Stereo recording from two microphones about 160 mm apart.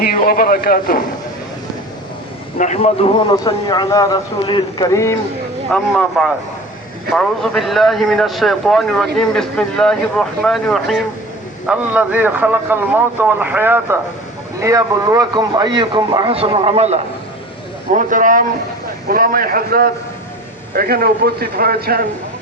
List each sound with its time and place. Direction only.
0.0 s a man's voice: 65° left (ahead or behind)
2.6 s a man's voice: 45° left (ahead or behind); by 5.1 s 20° left (ahead or behind)
5.7 s a man's voice: centre (ahead or behind); by 17.0 s 40° right (ahead or behind)
17.9 s a man's voice: 55° right (ahead or behind); by 22.0 s 70° right (ahead or behind)